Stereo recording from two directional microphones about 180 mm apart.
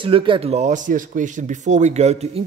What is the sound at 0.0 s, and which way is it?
Speech, 30° right (ahead or behind).